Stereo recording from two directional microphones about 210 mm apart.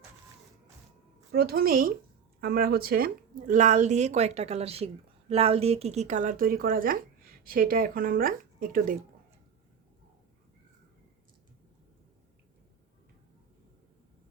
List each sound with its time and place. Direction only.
1.3 s a woman's voice: 50° right (ahead or behind)